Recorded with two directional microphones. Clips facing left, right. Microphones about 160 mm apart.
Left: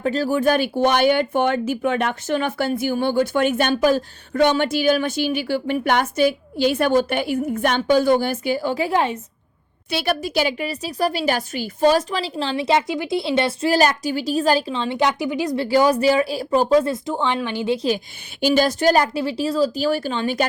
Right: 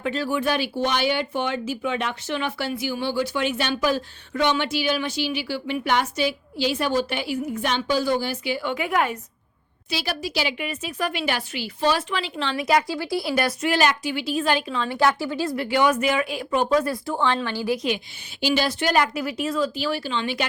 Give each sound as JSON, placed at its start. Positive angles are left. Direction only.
{"t": 0.0, "sound": "speech", "side_deg": 40}
{"t": 9.9, "sound": "speech", "side_deg": 55}
{"t": 15.5, "sound": "speech", "side_deg": 35}
{"t": 17.8, "sound": "speech", "side_deg": 45}